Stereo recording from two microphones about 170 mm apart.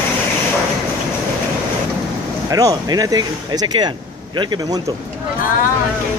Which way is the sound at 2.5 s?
20° right (ahead or behind).